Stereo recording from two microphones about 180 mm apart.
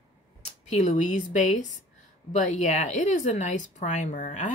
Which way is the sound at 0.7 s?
40° left (ahead or behind).